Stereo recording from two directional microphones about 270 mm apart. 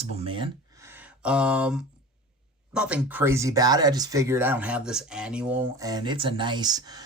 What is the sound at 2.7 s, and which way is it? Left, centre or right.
Speech, centre.